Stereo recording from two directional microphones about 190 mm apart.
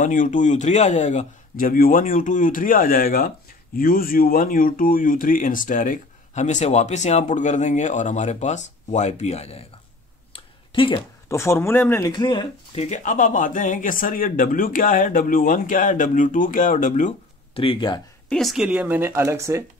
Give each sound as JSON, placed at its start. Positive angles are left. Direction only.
{"t": 0.0, "sound": "speech", "side_deg": 45}
{"t": 10.3, "sound": "a sound", "side_deg": 25}
{"t": 11.2, "sound": "speech", "side_deg": 15}
{"t": 12.1, "sound": "speech", "side_deg": 25}
{"t": 12.8, "sound": "speech", "side_deg": 40}
{"t": 17.6, "sound": "speech", "side_deg": 25}
{"t": 18.3, "sound": "speech", "side_deg": 0}